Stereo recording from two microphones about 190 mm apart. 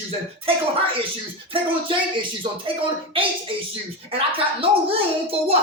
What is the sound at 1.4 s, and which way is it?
Speech, 25° right (ahead or behind).